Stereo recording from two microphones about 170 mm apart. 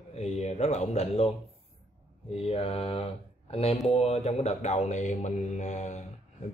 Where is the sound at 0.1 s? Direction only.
40° left (ahead or behind).